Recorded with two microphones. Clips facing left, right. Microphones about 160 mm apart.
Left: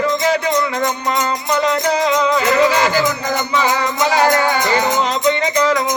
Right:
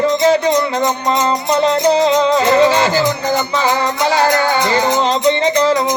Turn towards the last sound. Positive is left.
turn(degrees=-30)  # may be behind; listen again after turning